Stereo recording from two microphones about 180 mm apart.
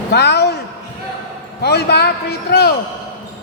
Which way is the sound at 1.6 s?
65° left (ahead or behind).